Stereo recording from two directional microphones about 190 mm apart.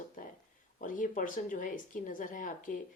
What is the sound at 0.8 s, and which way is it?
A woman's voice, 45° left (ahead or behind).